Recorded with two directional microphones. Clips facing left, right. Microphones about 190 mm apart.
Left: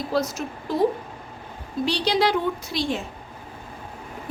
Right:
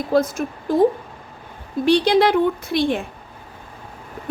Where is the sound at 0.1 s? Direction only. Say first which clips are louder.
Right 8 dB; 50° right (ahead or behind).